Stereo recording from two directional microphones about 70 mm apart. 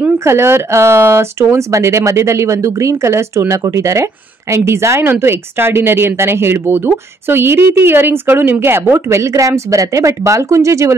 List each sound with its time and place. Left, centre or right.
0.2 s speech: right